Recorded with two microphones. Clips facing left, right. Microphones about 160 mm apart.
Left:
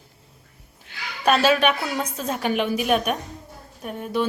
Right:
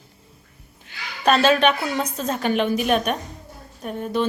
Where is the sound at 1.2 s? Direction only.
10° left (ahead or behind).